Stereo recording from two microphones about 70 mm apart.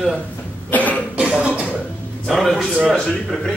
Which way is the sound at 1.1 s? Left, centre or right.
Centre.